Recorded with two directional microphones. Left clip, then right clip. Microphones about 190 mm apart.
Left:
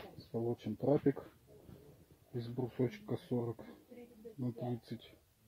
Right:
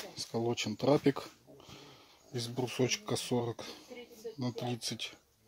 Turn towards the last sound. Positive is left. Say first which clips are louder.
# right 5 dB
turn(degrees=-35)  # may be behind; listen again after turning